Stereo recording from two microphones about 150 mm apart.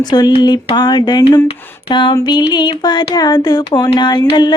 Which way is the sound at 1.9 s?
30° left (ahead or behind).